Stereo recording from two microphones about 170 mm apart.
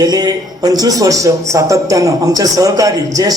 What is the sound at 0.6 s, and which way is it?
A man's voice, 20° right (ahead or behind).